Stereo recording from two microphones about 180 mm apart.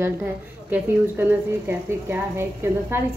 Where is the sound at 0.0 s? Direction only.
10° right (ahead or behind).